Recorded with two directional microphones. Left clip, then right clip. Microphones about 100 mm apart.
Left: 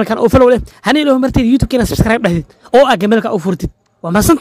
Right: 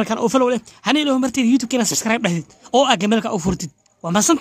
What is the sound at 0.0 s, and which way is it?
Speech, 50° left (ahead or behind).